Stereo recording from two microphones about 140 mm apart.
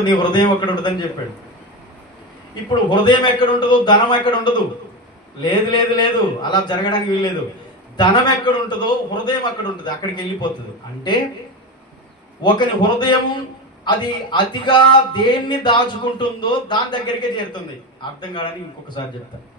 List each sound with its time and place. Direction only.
0.0 s a man's voice: 30° left (ahead or behind)
2.7 s a man's voice: 30° left (ahead or behind)
5.4 s a man's voice: 35° left (ahead or behind)
12.4 s a man's voice: 30° left (ahead or behind)